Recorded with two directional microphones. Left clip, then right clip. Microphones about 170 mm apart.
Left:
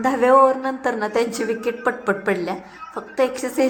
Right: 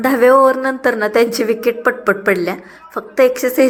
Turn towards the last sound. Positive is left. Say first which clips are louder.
# right 8 dB
turn(degrees=-20)  # may be behind; listen again after turning